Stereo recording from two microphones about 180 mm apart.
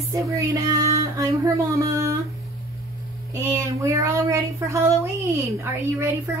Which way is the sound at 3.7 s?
15° right (ahead or behind).